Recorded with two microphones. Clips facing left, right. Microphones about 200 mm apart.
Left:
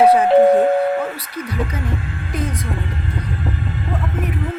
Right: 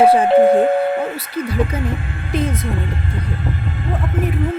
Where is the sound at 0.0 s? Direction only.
30° right (ahead or behind).